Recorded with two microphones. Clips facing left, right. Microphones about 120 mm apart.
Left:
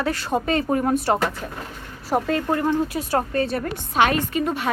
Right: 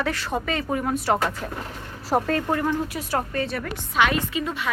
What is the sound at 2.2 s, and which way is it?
Speech, 20° left (ahead or behind).